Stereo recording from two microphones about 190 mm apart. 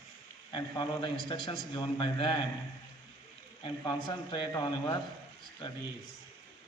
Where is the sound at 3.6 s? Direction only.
25° left (ahead or behind).